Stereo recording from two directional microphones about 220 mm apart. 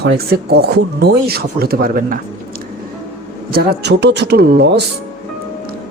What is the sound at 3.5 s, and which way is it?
Speech, 45° right (ahead or behind).